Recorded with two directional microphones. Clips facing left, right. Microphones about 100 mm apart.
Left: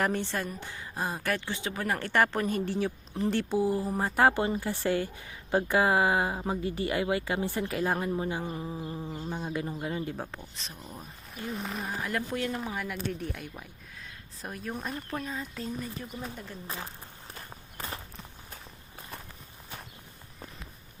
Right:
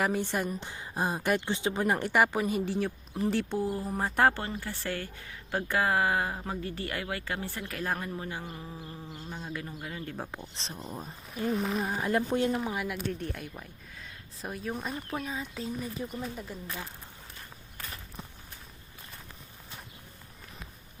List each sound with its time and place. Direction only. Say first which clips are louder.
0.0 s a woman's voice: right 1 dB; 10° right (ahead or behind)
4.4 s speech: left 7 dB; 15° left (ahead or behind)
10.4 s speech: right 3 dB; 30° right (ahead or behind)
11.3 s speech: right 6 dB; centre (ahead or behind)
12.0 s speech: right 5 dB; 25° right (ahead or behind)
12.7 s speech: right 1 dB; 5° right (ahead or behind)
17.7 s walk: left 5 dB; 35° left (ahead or behind)